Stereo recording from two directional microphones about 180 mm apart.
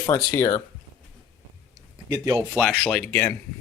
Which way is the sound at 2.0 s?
15° right (ahead or behind).